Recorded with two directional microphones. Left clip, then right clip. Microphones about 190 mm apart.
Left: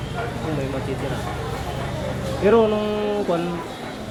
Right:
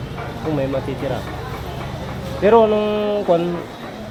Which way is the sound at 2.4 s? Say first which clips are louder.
Right 4 dB; 55° right (ahead or behind).